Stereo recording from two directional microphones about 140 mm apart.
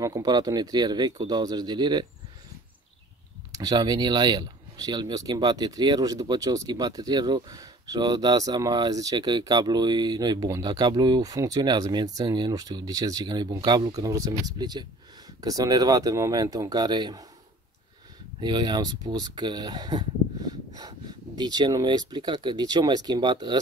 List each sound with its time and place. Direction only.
0.0 s speech: 25° right (ahead or behind)
3.5 s speech: 30° right (ahead or behind)
18.4 s speech: 35° right (ahead or behind)